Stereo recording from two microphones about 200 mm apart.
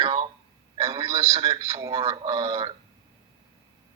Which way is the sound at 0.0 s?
25° right (ahead or behind).